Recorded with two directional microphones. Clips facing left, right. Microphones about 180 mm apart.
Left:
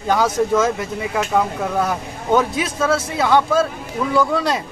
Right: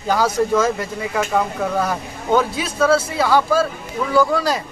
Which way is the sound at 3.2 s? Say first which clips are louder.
Left 1 dB; 20° left (ahead or behind).